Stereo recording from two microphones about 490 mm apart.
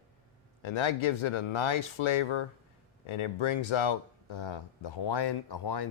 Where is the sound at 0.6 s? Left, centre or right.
Left.